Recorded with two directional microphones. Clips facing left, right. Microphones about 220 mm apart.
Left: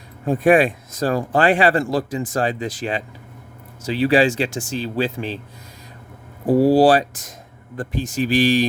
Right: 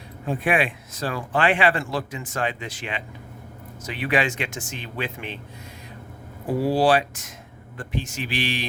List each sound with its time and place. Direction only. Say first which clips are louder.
0.3 s speech: left 8 dB; 40° left (ahead or behind)
6.5 s speech: left 7 dB; 40° left (ahead or behind)